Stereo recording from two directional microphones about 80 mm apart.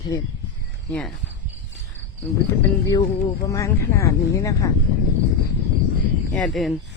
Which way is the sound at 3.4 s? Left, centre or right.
Left.